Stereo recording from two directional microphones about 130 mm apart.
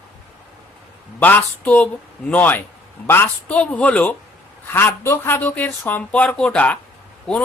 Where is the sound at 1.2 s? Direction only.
10° left (ahead or behind).